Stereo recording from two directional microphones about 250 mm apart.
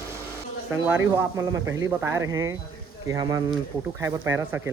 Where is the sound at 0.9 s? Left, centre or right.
Centre.